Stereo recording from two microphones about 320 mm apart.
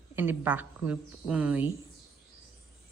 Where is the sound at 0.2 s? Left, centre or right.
Centre.